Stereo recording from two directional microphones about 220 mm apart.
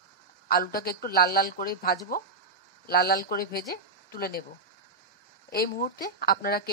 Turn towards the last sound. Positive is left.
turn(degrees=40)  # may be behind; listen again after turning